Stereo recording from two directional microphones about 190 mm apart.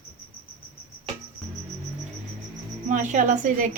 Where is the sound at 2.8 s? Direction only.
40° right (ahead or behind).